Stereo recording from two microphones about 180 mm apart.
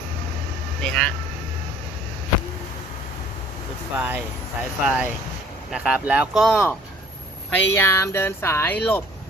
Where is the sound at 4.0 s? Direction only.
10° right (ahead or behind).